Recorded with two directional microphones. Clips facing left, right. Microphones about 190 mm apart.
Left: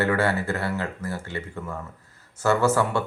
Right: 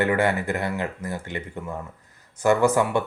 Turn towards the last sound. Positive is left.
turn(degrees=-15)  # may be behind; listen again after turning